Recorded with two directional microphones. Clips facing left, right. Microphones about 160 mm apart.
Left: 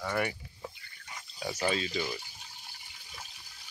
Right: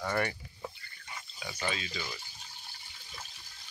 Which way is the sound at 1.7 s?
35° left (ahead or behind).